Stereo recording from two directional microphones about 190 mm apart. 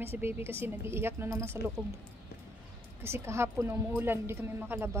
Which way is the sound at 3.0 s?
15° right (ahead or behind).